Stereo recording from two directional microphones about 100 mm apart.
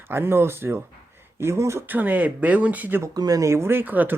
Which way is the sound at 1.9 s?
15° right (ahead or behind).